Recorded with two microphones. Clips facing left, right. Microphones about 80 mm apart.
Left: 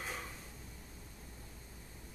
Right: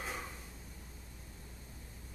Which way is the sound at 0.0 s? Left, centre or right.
Centre.